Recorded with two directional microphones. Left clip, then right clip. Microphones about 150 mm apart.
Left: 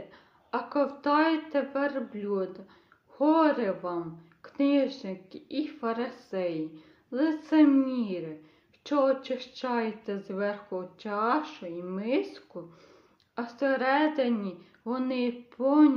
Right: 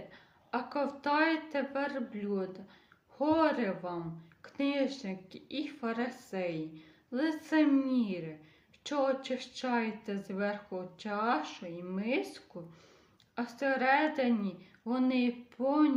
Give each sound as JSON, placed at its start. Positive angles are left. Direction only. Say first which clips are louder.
{"t": 0.1, "sound": "a woman's voice", "louder": "left 4 dB", "side_deg": -15}